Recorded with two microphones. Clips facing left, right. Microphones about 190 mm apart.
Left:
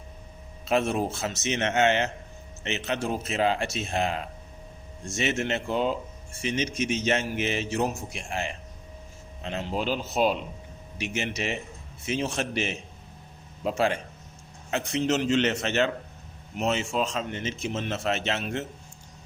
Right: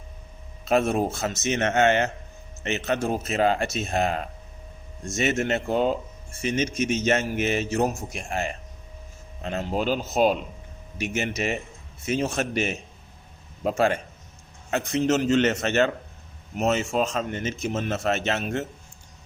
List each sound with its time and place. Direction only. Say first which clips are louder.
0.6 s a man's voice: right 3 dB; 45° right (ahead or behind)